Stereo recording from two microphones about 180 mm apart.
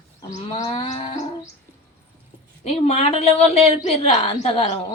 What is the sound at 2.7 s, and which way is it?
A woman's voice, 35° left (ahead or behind).